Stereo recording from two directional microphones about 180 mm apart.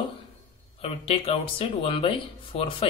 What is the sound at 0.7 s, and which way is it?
Speech, 30° left (ahead or behind).